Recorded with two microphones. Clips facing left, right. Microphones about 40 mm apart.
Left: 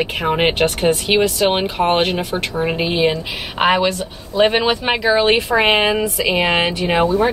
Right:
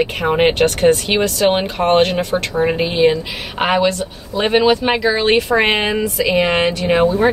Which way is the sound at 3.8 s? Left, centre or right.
Centre.